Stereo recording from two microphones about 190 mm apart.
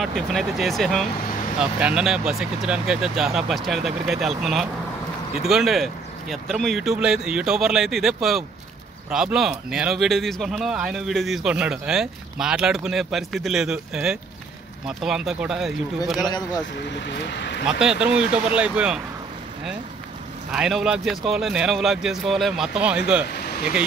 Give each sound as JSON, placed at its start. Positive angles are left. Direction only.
{"t": 0.0, "sound": "speech", "side_deg": 0}
{"t": 16.9, "sound": "speech", "side_deg": 65}
{"t": 17.6, "sound": "speech", "side_deg": -5}
{"t": 20.5, "sound": "speech", "side_deg": -5}
{"t": 23.3, "sound": "a sound", "side_deg": 55}